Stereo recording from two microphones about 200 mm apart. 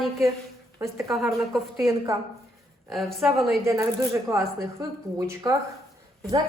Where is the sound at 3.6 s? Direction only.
15° right (ahead or behind).